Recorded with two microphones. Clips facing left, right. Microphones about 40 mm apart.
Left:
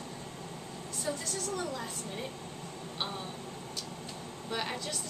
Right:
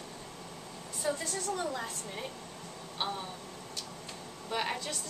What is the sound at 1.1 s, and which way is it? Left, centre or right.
Speech, centre.